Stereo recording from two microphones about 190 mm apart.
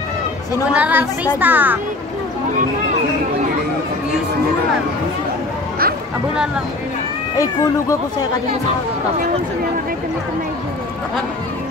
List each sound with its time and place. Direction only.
0.7 s speech: 5° right (ahead or behind)
6.3 s speech: 5° right (ahead or behind)
7.3 s speech: 15° left (ahead or behind)